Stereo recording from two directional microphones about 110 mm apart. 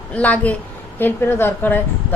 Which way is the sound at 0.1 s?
15° left (ahead or behind).